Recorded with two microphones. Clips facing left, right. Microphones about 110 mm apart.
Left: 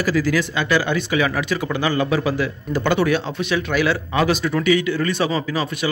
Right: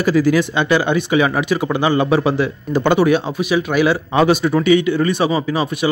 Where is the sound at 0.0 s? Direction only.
20° right (ahead or behind).